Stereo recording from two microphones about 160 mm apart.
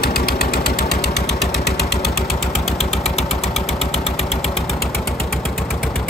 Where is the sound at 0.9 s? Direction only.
90° left.